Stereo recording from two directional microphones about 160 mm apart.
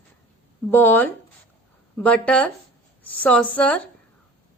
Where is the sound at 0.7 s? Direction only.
10° left (ahead or behind).